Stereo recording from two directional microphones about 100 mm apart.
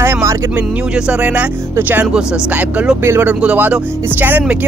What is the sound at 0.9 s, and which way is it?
Speech, 10° right (ahead or behind).